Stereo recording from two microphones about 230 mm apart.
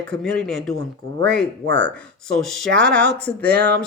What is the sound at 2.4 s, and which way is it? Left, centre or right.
Speech, centre.